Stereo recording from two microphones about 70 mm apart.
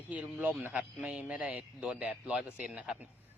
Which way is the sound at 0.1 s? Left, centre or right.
Right.